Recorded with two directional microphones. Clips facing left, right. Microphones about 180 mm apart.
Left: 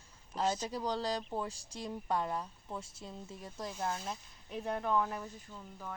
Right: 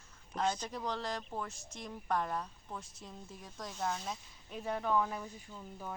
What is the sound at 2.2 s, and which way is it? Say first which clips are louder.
Speech: left 1 dB; 10° left (ahead or behind).